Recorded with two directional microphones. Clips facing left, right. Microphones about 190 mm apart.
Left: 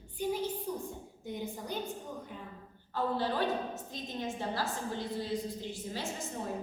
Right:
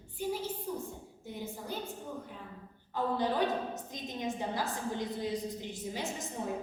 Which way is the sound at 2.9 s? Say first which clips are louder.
Right 1 dB; 15° right (ahead or behind).